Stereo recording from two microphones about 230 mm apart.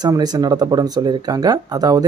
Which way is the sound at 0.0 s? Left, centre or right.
Centre.